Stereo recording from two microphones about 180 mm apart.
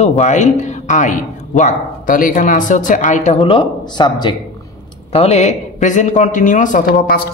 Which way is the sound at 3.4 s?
25° left (ahead or behind).